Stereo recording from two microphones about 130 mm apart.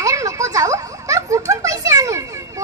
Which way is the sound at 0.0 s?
25° right (ahead or behind).